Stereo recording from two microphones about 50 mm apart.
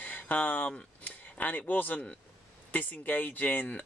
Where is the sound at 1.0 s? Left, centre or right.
Left.